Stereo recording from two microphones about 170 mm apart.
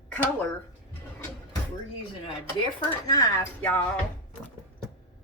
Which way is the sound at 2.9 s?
20° left (ahead or behind).